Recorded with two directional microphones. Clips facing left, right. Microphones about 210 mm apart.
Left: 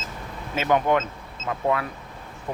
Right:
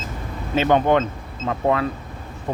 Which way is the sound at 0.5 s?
30° right (ahead or behind).